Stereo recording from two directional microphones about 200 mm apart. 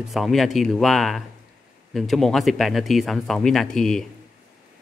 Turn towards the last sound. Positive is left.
turn(degrees=0)  # may be behind; listen again after turning